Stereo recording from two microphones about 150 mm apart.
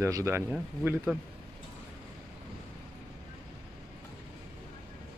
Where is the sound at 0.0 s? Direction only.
20° right (ahead or behind).